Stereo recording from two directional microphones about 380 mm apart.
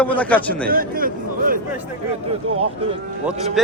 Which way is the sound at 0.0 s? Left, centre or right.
Centre.